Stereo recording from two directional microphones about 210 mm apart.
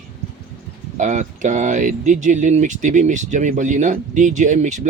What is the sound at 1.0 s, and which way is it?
Speech, 35° right (ahead or behind).